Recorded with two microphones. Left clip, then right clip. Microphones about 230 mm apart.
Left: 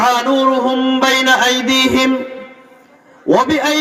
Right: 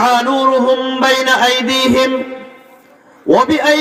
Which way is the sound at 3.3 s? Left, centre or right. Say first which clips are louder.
Right 2 dB; right.